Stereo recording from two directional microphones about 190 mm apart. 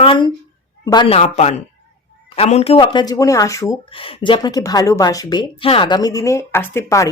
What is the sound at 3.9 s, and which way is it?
A woman's voice, 30° left (ahead or behind).